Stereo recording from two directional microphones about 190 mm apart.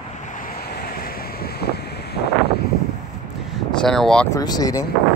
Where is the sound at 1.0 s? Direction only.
50° left (ahead or behind).